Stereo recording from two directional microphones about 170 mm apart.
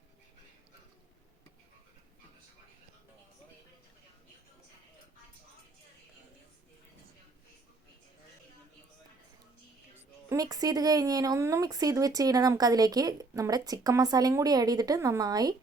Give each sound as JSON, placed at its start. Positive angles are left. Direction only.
{"t": 10.2, "sound": "speech", "side_deg": -20}